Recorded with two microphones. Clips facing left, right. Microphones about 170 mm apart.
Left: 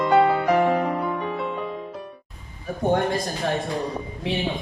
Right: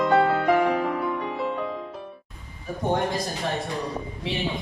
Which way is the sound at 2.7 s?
55° left (ahead or behind).